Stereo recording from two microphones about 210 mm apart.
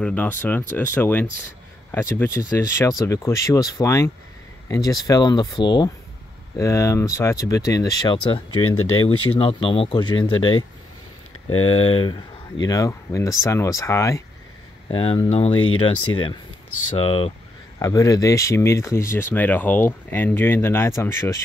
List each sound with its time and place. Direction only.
0.0 s speech: 10° left (ahead or behind); by 8.4 s 25° left (ahead or behind)
8.5 s speech: 90° left
9.4 s speech: 25° left (ahead or behind)
11.7 s speech: 25° left (ahead or behind)
14.9 s speech: 25° left (ahead or behind)
16.9 s speech: 25° left (ahead or behind)
17.7 s speech: 15° left (ahead or behind)